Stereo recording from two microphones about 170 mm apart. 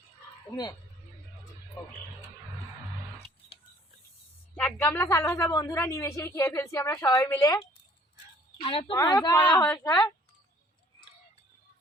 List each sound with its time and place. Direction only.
4.5 s a woman's voice: 10° left (ahead or behind)
8.6 s a woman's voice: 30° left (ahead or behind)
9.6 s a woman's voice: 15° left (ahead or behind)